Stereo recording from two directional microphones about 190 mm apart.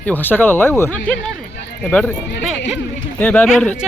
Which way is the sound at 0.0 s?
10° left (ahead or behind).